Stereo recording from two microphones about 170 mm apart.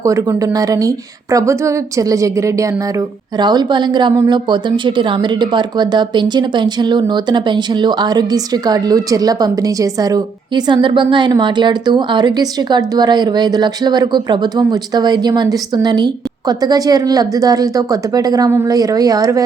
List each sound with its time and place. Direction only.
0.0 s speech: 20° right (ahead or behind)